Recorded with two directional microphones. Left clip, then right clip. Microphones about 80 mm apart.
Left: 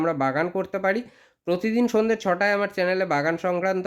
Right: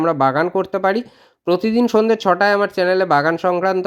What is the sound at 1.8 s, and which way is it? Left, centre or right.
Speech, right.